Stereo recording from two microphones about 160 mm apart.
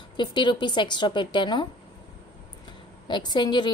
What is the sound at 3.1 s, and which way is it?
Speech, 30° left (ahead or behind).